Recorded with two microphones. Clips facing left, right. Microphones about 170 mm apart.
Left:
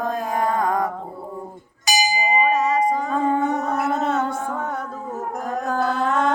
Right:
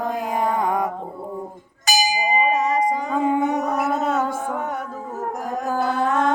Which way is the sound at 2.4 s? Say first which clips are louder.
Left 1 dB; 20° right (ahead or behind).